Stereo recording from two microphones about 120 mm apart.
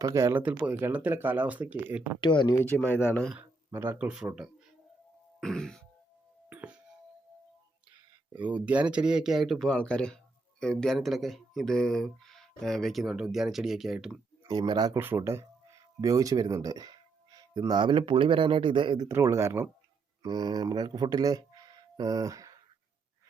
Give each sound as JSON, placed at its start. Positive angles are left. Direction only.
{"t": 0.0, "sound": "speech", "side_deg": -25}
{"t": 0.4, "sound": "speech", "side_deg": -15}
{"t": 2.2, "sound": "speech", "side_deg": 40}
{"t": 2.6, "sound": "speech", "side_deg": 15}
{"t": 3.7, "sound": "speech", "side_deg": -20}
{"t": 5.4, "sound": "throat clearing", "side_deg": 5}
{"t": 6.5, "sound": "music", "side_deg": -15}
{"t": 8.4, "sound": "speech", "side_deg": -10}
{"t": 14.4, "sound": "speech", "side_deg": -35}
{"t": 14.9, "sound": "speech", "side_deg": -20}
{"t": 19.0, "sound": "speech", "side_deg": -25}
{"t": 20.2, "sound": "speech", "side_deg": -35}